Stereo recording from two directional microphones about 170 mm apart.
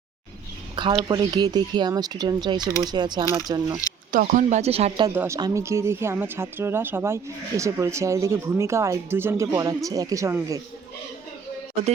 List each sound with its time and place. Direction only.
0.8 s speech: 30° right (ahead or behind)
4.1 s speech: 50° right (ahead or behind); by 5.0 s 35° right (ahead or behind)
5.0 s a woman's voice: 15° right (ahead or behind)